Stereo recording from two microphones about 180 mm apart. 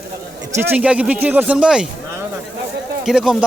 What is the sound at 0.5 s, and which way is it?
Speech, 10° right (ahead or behind).